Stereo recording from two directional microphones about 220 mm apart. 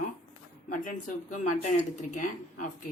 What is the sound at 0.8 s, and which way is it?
Speech, 35° left (ahead or behind).